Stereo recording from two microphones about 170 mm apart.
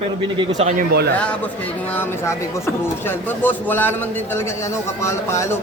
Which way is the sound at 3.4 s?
10° left (ahead or behind).